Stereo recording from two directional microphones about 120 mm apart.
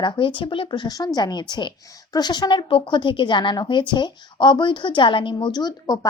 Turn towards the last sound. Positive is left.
turn(degrees=30)  # may be behind; listen again after turning